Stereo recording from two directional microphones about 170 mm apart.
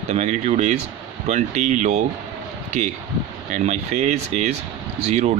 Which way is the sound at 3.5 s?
40° right (ahead or behind).